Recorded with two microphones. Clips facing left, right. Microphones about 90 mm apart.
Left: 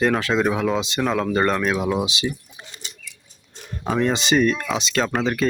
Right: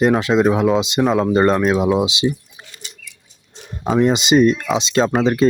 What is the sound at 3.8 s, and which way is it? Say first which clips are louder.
Speech: right 5 dB; 20° right (ahead or behind).